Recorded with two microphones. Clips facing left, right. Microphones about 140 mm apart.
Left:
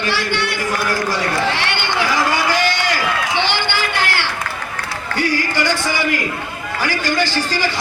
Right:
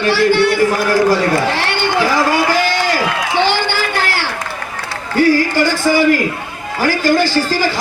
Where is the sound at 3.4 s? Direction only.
40° right (ahead or behind).